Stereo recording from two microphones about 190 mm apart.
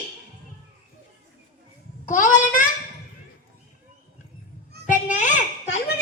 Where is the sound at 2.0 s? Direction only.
45° left (ahead or behind).